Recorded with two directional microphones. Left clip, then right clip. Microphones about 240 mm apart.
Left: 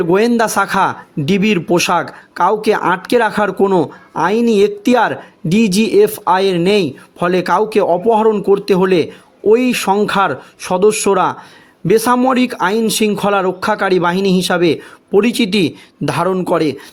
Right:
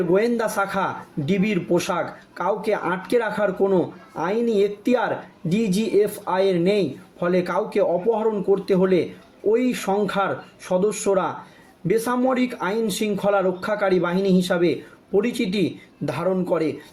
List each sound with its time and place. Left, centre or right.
0.1 s speech: left